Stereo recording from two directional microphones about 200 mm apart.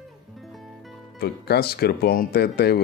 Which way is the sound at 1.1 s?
55° left (ahead or behind).